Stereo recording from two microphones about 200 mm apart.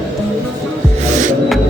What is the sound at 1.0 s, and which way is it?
Music, 35° right (ahead or behind).